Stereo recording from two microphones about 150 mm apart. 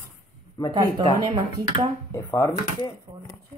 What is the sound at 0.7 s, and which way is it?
Speech, 25° right (ahead or behind).